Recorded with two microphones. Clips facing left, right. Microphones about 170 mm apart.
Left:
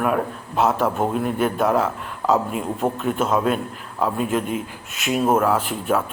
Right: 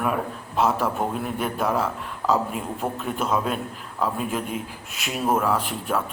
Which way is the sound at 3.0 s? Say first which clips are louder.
Left 2 dB; centre (ahead or behind).